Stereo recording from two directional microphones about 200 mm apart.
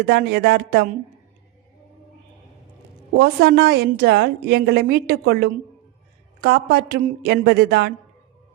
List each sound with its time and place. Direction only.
0.0 s a woman's voice: 50° right (ahead or behind)
3.1 s a woman's voice: 50° right (ahead or behind)